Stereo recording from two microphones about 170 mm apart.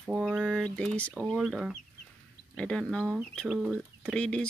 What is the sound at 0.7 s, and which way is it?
Speech, 5° left (ahead or behind).